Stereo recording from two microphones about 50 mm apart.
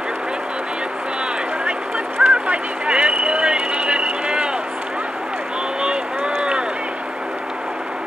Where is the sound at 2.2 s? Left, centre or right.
Right.